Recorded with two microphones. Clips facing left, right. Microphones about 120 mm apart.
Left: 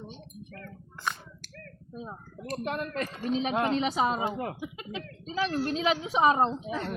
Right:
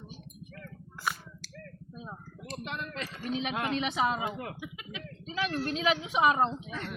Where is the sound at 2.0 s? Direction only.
45° left (ahead or behind).